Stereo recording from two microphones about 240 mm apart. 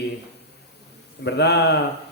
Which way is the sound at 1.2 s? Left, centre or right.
Left.